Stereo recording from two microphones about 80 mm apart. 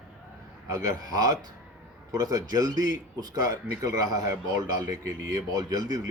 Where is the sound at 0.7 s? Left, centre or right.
Right.